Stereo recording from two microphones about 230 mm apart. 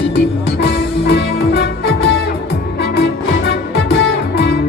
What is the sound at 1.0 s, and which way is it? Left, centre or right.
Music, left.